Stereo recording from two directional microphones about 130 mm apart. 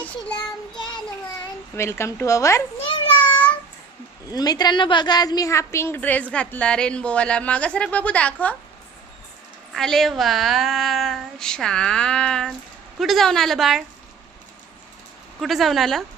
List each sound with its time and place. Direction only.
0.0 s child singing: 10° left (ahead or behind)
1.7 s speech: 20° left (ahead or behind)
3.2 s a sound: 15° left (ahead or behind)
4.3 s a woman's voice: 30° left (ahead or behind); by 8.5 s 10° left (ahead or behind)
9.7 s speech: centre (ahead or behind)
15.4 s speech: centre (ahead or behind)